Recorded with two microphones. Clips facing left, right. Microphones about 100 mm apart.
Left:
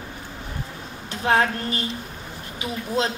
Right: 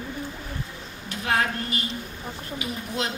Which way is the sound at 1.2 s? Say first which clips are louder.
Left 5 dB; 30° left (ahead or behind).